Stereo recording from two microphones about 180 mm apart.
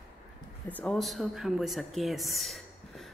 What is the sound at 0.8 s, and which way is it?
Speech, 5° left (ahead or behind).